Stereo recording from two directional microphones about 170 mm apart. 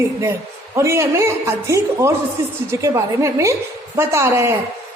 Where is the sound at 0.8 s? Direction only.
15° right (ahead or behind).